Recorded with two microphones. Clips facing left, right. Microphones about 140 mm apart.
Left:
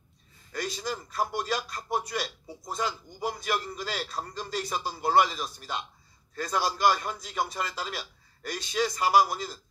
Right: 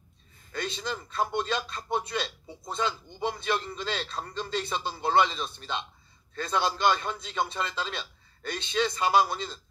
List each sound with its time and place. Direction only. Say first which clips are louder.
0.6 s a man's voice: even; 25° right (ahead or behind)